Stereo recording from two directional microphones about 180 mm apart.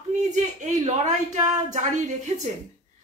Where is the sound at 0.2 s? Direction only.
40° right (ahead or behind).